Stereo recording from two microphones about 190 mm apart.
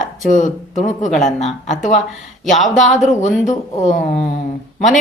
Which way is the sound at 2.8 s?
40° left (ahead or behind).